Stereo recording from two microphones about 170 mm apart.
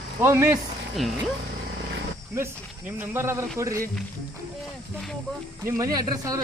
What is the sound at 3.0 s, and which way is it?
Speech, 15° right (ahead or behind).